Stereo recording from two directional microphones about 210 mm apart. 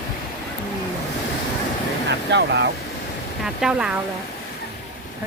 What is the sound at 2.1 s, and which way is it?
Speech, 55° right (ahead or behind).